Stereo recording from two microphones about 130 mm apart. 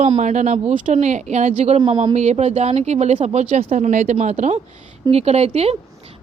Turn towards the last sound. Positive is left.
turn(degrees=-55)  # may be behind; listen again after turning